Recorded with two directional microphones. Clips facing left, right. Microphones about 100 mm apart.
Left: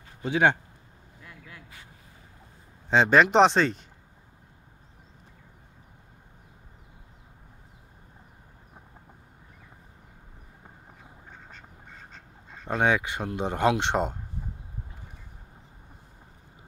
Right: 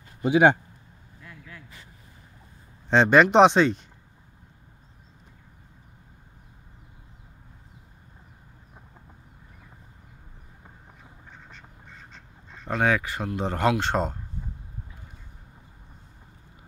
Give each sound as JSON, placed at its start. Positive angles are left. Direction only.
{"t": 0.2, "sound": "speech", "side_deg": -15}
{"t": 2.9, "sound": "speech", "side_deg": 0}
{"t": 12.6, "sound": "speech", "side_deg": 20}